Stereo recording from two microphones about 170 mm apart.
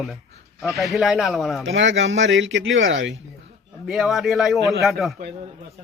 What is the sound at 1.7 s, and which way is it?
Speech, 90° right.